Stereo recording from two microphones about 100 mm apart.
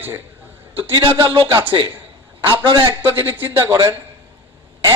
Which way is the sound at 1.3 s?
55° right (ahead or behind).